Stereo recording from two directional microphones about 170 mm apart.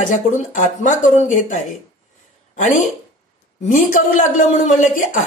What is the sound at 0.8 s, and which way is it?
Speech, 45° left (ahead or behind).